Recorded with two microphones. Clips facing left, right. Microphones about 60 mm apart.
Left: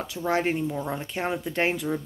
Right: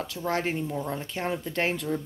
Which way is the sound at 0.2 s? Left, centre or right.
Centre.